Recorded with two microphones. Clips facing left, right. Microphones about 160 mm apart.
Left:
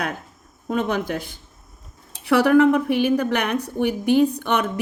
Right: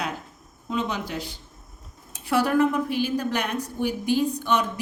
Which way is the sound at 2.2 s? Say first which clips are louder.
Left 6 dB; 65° left (ahead or behind).